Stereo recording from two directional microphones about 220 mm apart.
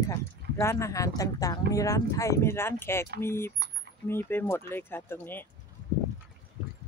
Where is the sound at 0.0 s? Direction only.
15° left (ahead or behind).